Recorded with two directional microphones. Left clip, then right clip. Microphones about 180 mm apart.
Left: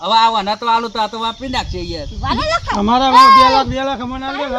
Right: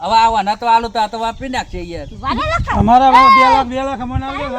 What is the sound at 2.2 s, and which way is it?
Speech, 30° left (ahead or behind).